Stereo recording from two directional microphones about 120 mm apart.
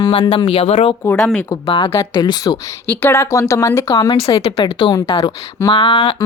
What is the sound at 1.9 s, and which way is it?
Speech, 25° left (ahead or behind).